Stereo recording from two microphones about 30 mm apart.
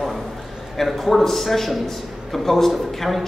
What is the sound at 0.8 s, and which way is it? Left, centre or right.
A man's voice, centre.